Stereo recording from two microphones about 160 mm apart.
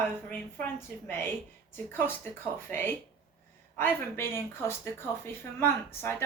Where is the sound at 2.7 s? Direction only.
15° left (ahead or behind).